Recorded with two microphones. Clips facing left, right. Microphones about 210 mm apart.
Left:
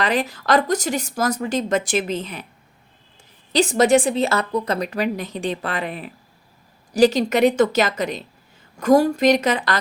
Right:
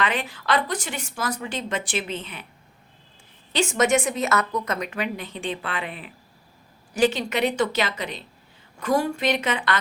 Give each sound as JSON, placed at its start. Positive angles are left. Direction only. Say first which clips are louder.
{"t": 0.0, "sound": "a woman's voice", "louder": "left 5 dB", "side_deg": 40}
{"t": 3.5, "sound": "a woman's voice", "louder": "left 5 dB", "side_deg": 35}